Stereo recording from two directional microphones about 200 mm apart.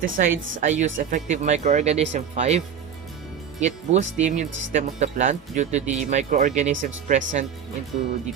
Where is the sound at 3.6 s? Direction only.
35° right (ahead or behind).